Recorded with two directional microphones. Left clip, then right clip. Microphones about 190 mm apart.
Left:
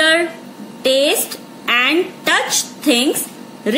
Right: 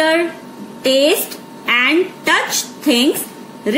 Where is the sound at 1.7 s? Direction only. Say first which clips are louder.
Right 1 dB; 20° left (ahead or behind).